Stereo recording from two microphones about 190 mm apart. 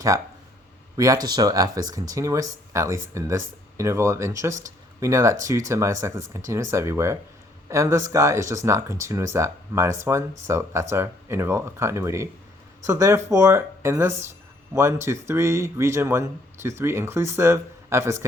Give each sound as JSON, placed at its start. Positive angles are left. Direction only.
{"t": 0.9, "sound": "speech", "side_deg": -20}